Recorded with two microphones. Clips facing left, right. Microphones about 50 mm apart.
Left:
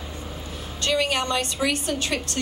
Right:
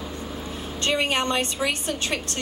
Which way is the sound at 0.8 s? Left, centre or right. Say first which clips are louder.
Even; right.